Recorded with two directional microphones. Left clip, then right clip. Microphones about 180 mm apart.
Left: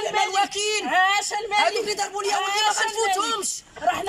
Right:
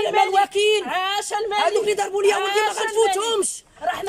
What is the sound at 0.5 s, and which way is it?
Speech, 45° right (ahead or behind).